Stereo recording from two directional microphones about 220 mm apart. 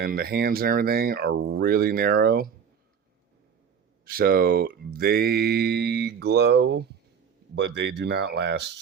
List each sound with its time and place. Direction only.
0.0 s speech: 45° right (ahead or behind)
4.0 s speech: 45° right (ahead or behind)